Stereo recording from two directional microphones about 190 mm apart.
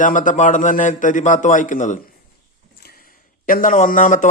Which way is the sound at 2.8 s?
50° left (ahead or behind).